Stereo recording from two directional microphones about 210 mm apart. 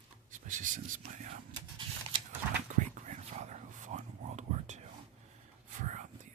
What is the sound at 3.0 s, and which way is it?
Whispering, 35° right (ahead or behind).